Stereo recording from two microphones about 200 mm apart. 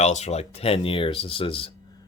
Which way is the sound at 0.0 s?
35° left (ahead or behind).